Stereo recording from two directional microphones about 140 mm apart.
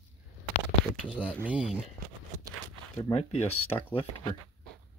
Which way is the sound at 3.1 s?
45° left (ahead or behind).